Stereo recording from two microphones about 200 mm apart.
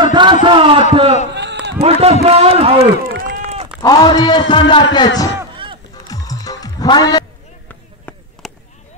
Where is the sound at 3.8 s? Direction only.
20° left (ahead or behind).